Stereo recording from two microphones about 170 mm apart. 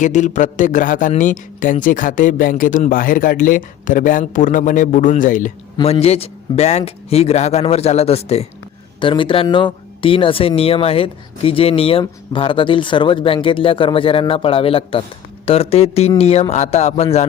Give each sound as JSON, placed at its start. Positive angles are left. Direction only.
{"t": 0.0, "sound": "a man's voice", "side_deg": 45}
{"t": 5.7, "sound": "speech", "side_deg": 35}